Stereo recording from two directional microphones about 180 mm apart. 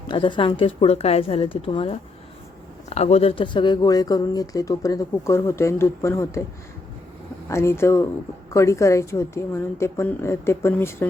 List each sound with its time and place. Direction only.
0.1 s speech: 25° left (ahead or behind)
7.4 s a woman's voice: 15° left (ahead or behind)